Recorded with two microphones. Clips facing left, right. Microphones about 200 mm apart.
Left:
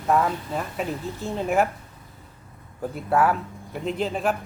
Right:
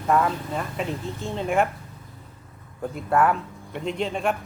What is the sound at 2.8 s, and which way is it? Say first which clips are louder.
Speech: even; 5° left (ahead or behind).